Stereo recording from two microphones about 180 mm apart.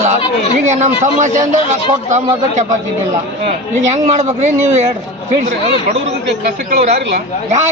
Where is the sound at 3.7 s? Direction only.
40° right (ahead or behind).